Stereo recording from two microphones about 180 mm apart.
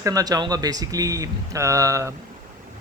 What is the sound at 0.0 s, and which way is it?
Speech, 20° right (ahead or behind).